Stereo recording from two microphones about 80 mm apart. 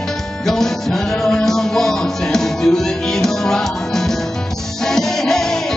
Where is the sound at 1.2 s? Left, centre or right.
Centre.